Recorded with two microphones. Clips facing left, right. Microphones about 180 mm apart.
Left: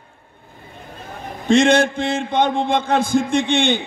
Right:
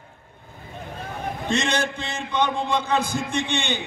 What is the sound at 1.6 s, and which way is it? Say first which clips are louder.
A man's voice: left 10 dB; 50° left (ahead or behind).